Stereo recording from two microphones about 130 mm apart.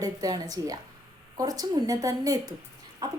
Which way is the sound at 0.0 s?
30° right (ahead or behind).